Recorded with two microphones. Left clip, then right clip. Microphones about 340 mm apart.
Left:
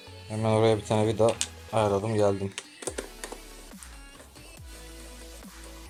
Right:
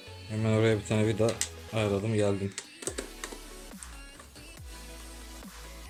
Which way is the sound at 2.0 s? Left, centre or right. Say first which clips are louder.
Left 3 dB; left.